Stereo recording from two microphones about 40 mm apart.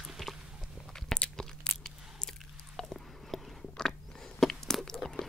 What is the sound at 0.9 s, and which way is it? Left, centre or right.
Crunch, centre.